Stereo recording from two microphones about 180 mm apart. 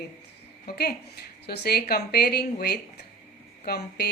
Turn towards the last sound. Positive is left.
turn(degrees=60)  # may be behind; listen again after turning